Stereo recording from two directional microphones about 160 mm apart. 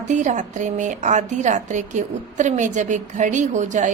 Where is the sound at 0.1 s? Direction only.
50° right (ahead or behind).